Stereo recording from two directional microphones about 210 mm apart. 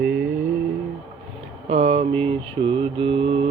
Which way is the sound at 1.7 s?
30° right (ahead or behind).